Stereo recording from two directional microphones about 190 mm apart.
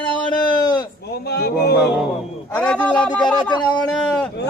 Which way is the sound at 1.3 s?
55° left (ahead or behind).